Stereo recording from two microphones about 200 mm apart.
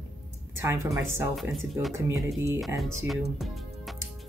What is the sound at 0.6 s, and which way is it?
Speech, 15° right (ahead or behind).